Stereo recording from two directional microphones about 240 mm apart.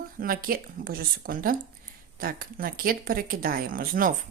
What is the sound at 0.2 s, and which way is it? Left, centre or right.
Speech, right.